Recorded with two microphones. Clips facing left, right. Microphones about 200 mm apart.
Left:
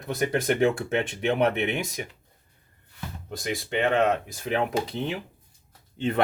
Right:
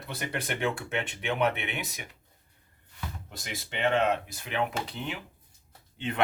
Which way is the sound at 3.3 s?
45° left (ahead or behind).